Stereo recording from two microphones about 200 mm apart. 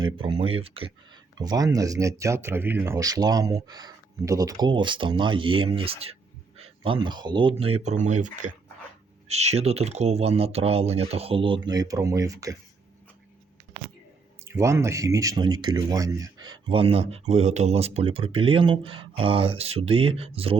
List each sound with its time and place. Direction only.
0.0 s speech: 25° right (ahead or behind)
14.4 s speech: 15° right (ahead or behind)